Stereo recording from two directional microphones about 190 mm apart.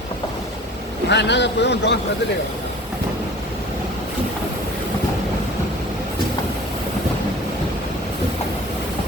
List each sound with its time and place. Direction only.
1.1 s a man's voice: 65° left (ahead or behind)